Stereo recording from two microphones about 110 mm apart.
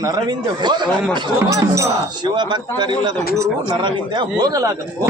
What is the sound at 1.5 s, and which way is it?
Speech, 30° right (ahead or behind).